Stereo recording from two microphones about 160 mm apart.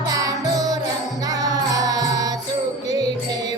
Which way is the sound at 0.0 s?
20° right (ahead or behind).